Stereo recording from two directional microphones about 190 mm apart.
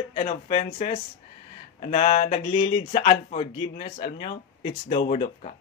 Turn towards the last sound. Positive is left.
turn(degrees=35)  # may be behind; listen again after turning